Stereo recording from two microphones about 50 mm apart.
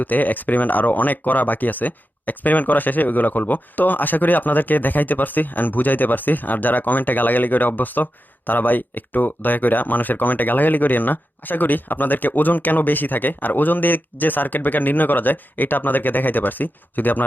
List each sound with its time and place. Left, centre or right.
0.0 s speech: left